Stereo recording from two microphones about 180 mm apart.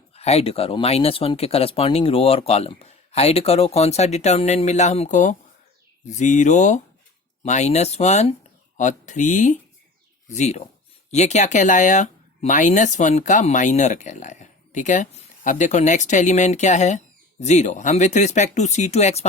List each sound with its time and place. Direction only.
0.1 s speech: 35° left (ahead or behind)